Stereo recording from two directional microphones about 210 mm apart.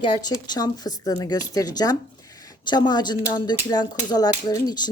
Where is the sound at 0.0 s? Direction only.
20° left (ahead or behind).